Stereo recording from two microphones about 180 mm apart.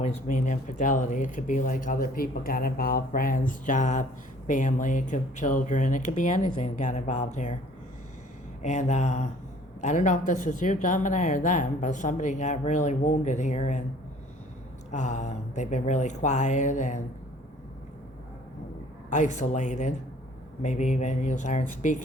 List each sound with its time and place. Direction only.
0.0 s speech: 40° left (ahead or behind)
8.6 s speech: 40° left (ahead or behind)
14.8 s speech: 40° left (ahead or behind)
19.1 s speech: 40° left (ahead or behind)